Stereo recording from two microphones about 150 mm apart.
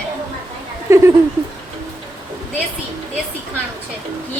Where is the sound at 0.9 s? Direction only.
20° right (ahead or behind).